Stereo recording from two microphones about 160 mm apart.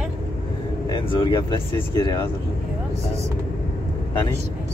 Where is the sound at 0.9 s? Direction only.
30° left (ahead or behind).